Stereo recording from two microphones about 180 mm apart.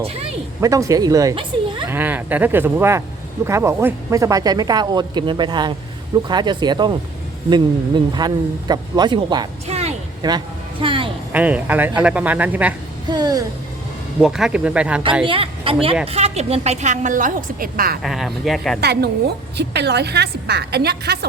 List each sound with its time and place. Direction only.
0.0 s speech: 35° right (ahead or behind)
0.6 s speech: 20° right (ahead or behind)
1.9 s speech: 10° right (ahead or behind)
9.6 s a sound: 35° right (ahead or behind)
10.2 s a woman's voice: 25° right (ahead or behind)
11.3 s speech: 10° right (ahead or behind)
13.1 s speech: 20° right (ahead or behind)
14.2 s speech: 5° right (ahead or behind)
15.2 s a woman's voice: 30° right (ahead or behind); by 18.0 s 55° right (ahead or behind)
18.0 s speech: centre (ahead or behind)
18.8 s a woman's voice: 65° right (ahead or behind)